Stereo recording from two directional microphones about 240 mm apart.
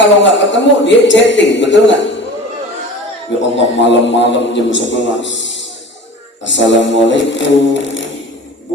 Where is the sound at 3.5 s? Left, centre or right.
Left.